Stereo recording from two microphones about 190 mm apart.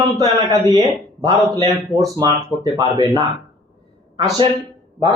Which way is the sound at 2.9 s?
20° right (ahead or behind).